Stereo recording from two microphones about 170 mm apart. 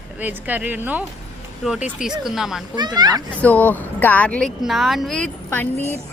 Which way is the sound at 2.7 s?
25° right (ahead or behind).